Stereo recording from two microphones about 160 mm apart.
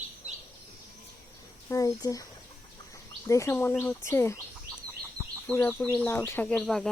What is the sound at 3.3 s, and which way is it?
Speech, 15° left (ahead or behind).